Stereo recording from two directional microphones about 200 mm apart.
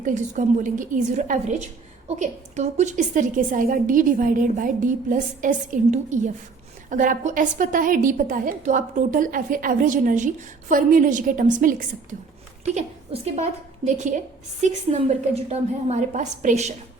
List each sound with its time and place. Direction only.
0.0 s a woman's voice: 40° right (ahead or behind)
13.2 s a woman's voice: 35° right (ahead or behind)